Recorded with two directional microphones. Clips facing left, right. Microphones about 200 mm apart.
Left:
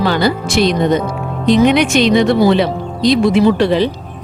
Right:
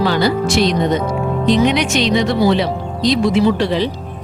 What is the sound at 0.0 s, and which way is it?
Speech, 55° left (ahead or behind).